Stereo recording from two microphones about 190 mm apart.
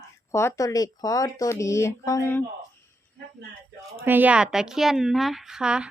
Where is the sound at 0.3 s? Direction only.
15° left (ahead or behind).